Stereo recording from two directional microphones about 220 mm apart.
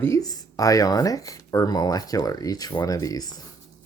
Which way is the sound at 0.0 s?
15° left (ahead or behind).